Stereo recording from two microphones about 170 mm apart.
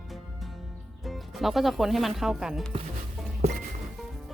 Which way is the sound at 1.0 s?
Centre (ahead or behind).